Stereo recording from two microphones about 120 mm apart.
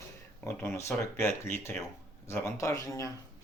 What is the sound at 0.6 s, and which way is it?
Speech, 20° left (ahead or behind).